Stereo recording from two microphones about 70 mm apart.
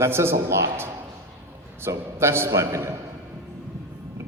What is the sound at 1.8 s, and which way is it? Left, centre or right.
A woman's voice, right.